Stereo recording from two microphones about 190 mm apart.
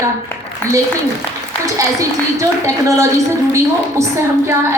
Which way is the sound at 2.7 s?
15° right (ahead or behind).